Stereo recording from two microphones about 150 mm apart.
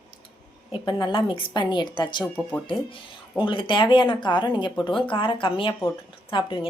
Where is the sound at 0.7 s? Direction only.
30° left (ahead or behind).